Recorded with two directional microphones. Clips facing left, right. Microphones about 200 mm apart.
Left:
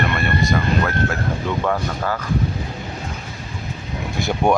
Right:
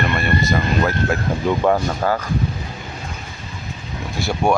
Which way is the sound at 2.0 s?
30° right (ahead or behind).